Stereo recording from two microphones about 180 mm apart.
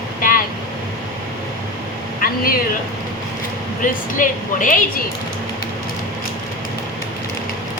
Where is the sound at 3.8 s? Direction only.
45° left (ahead or behind).